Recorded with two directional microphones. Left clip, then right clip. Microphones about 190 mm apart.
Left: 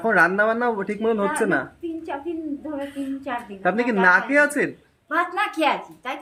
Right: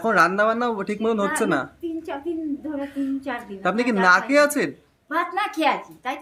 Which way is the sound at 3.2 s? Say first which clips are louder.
Left 4 dB; 10° right (ahead or behind).